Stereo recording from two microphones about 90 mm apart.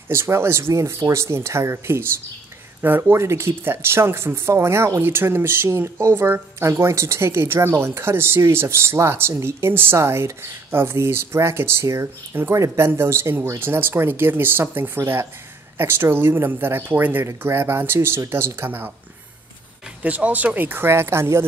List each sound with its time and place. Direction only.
0.1 s speech: 30° right (ahead or behind)
20.0 s speech: 15° right (ahead or behind)